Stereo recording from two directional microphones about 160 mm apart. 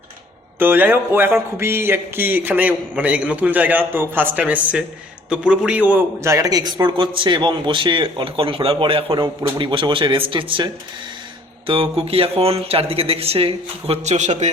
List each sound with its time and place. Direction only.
0.6 s a man's voice: 15° right (ahead or behind); by 14.5 s 45° right (ahead or behind)